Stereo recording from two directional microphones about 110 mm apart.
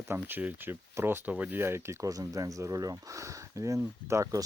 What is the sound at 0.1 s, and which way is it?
Speech, 15° right (ahead or behind).